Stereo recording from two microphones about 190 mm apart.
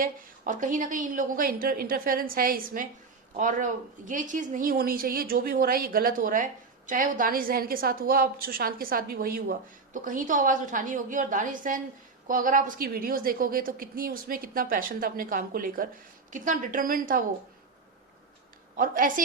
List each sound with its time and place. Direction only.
0.0 s speech: 45° right (ahead or behind)
18.8 s speech: 45° right (ahead or behind)